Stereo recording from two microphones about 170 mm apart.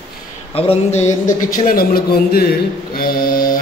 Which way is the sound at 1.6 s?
60° left (ahead or behind).